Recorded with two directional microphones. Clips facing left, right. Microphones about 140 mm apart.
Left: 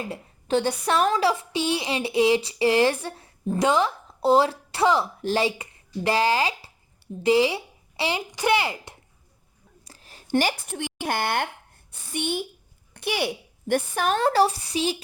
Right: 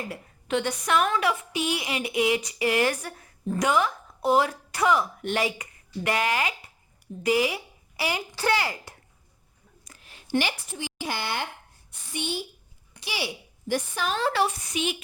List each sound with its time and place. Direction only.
0.1 s a woman's voice: 30° left (ahead or behind)
9.8 s a sound: 35° left (ahead or behind)
10.7 s a woman's voice: 55° left (ahead or behind); by 15.0 s 35° left (ahead or behind)